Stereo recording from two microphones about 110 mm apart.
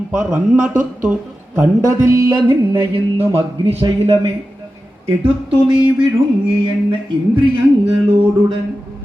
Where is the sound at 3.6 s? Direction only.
55° right (ahead or behind).